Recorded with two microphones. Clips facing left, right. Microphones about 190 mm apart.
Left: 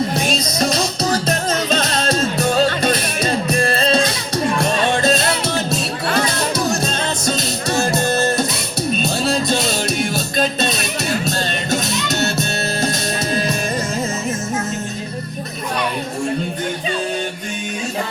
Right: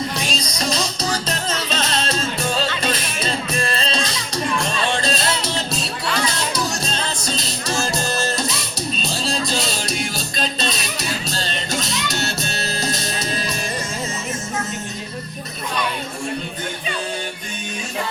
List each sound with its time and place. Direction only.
0.2 s music: 50° left (ahead or behind)